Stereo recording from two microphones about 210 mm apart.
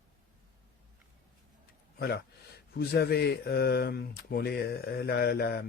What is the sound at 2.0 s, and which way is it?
Speech, 50° left (ahead or behind).